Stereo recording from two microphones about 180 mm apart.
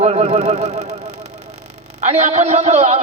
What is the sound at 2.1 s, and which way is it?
Speech, 35° right (ahead or behind).